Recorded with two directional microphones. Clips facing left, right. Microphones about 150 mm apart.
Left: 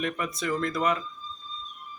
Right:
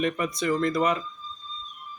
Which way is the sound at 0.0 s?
Centre (ahead or behind).